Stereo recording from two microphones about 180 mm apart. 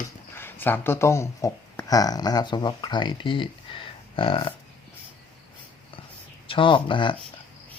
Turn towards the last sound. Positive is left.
turn(degrees=25)  # may be behind; listen again after turning